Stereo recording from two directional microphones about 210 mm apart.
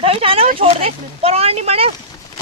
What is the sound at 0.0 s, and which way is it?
Speech, 25° right (ahead or behind).